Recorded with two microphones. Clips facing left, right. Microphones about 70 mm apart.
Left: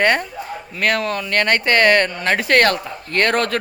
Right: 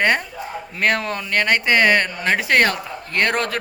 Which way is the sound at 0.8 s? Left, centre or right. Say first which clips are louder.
Left 1 dB; right.